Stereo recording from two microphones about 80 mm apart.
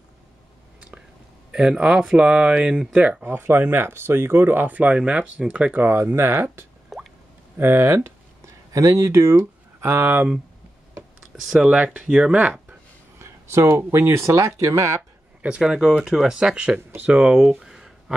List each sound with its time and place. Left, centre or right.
1.5 s speech: centre
3.3 s speech: right
6.1 s speech: right
6.9 s drip: centre
7.5 s speech: right
8.7 s speech: right
11.5 s speech: centre
13.2 s speech: right
15.4 s speech: centre
17.4 s a sound: centre